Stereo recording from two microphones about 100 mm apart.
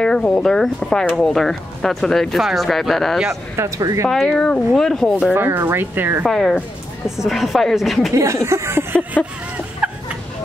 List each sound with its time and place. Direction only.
0.0 s speech: 10° left (ahead or behind)
3.5 s speech: 30° right (ahead or behind)
4.1 s speech: 5° left (ahead or behind)
5.3 s speech: 20° right (ahead or behind)
6.2 s speech: 5° left (ahead or behind)
8.1 s speech: 30° right (ahead or behind)
9.8 s chicken: 10° right (ahead or behind)